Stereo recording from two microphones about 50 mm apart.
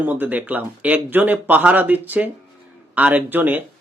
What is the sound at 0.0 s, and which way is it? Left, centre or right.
Speech, right.